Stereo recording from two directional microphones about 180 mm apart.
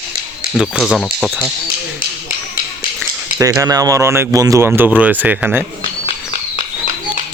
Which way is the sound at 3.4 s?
20° right (ahead or behind).